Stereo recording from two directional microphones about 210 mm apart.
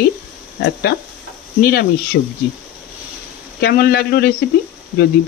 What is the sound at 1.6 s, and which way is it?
Speech, 45° left (ahead or behind).